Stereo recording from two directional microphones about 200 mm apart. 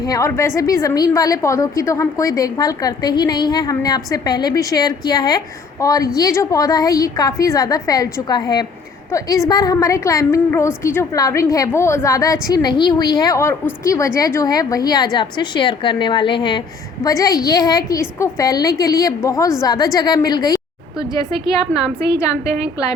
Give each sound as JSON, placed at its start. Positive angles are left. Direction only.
{"t": 0.0, "sound": "a woman's voice", "side_deg": 15}
{"t": 21.7, "sound": "a woman's voice", "side_deg": -5}